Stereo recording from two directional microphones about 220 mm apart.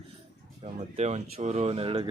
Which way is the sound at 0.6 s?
30° right (ahead or behind).